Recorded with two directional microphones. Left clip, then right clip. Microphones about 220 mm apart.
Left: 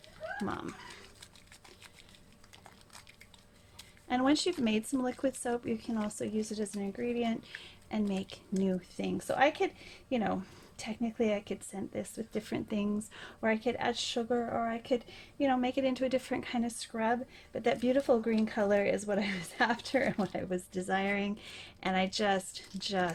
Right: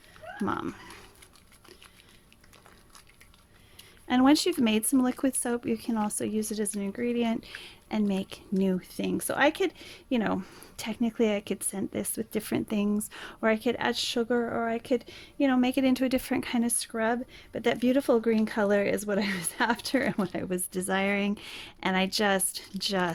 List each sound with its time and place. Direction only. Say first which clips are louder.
0.4 s speech: right 10 dB; 45° right (ahead or behind)
4.1 s speech: right 6 dB; 45° right (ahead or behind)